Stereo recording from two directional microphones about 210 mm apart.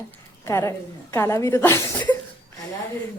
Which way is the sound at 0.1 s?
10° left (ahead or behind).